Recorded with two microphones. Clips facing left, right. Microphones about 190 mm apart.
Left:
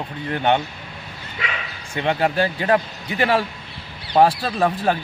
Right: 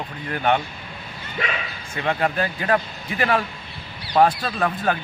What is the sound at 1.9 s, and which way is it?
A man's voice, 30° left (ahead or behind).